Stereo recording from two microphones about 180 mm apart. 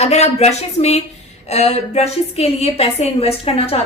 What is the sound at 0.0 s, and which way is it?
A woman's voice, 35° left (ahead or behind).